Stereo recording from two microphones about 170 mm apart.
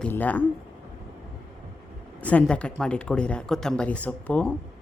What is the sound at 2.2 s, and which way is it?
Speech, 10° left (ahead or behind).